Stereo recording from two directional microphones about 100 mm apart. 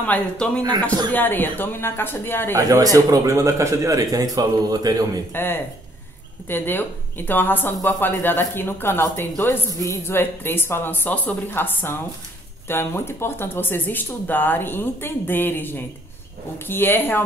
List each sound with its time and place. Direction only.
0.0 s speech: 15° left (ahead or behind)
0.6 s a man's voice: 40° right (ahead or behind)
1.1 s speech: 20° left (ahead or behind)
2.5 s a man's voice: 35° right (ahead or behind)
5.3 s speech: 20° left (ahead or behind)